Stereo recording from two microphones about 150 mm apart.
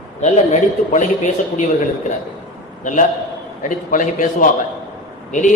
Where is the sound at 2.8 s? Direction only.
55° left (ahead or behind).